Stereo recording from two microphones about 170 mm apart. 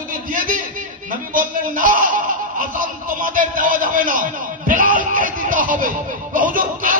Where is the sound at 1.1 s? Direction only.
50° right (ahead or behind).